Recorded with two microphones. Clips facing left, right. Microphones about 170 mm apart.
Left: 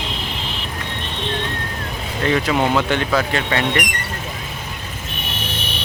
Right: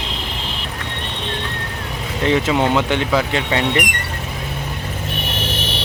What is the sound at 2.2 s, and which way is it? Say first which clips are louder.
Speech: right 1 dB; 20° right (ahead or behind).